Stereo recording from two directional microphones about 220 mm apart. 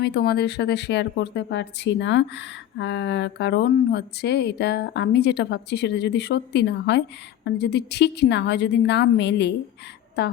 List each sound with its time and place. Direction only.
0.0 s speech: 50° left (ahead or behind)